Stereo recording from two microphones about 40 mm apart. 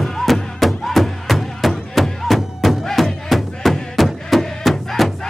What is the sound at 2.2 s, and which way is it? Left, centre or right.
Music, centre.